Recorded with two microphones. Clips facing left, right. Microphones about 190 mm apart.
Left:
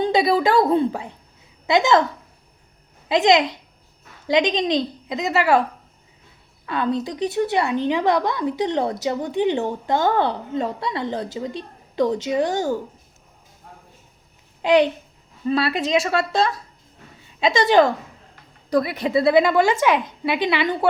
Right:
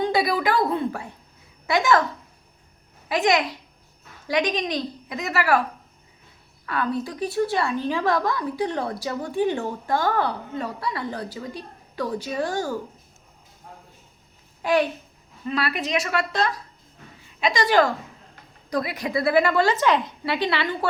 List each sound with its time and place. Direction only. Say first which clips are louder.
0.0 s a woman's voice: left 4 dB; 25° left (ahead or behind)
3.1 s a woman's voice: left 5 dB; 20° left (ahead or behind)
6.7 s a woman's voice: left 3 dB; 25° left (ahead or behind)
14.6 s a child's voice: left 5 dB; 20° left (ahead or behind)